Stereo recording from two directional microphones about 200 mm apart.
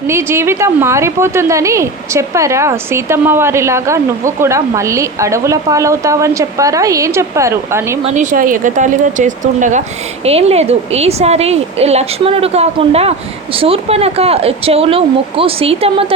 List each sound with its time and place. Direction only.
0.1 s a woman's voice: 15° right (ahead or behind)
8.0 s a woman's voice: 40° right (ahead or behind)